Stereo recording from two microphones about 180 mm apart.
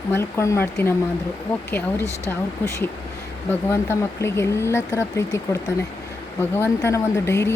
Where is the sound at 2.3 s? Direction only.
15° left (ahead or behind).